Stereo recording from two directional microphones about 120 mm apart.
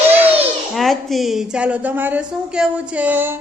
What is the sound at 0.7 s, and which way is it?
A woman's voice, centre (ahead or behind).